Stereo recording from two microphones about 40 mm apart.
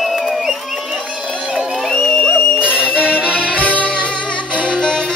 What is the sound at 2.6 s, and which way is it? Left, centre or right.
Music, right.